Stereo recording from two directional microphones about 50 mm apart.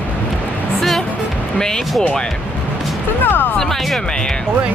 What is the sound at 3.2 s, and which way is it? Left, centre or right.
Speech, left.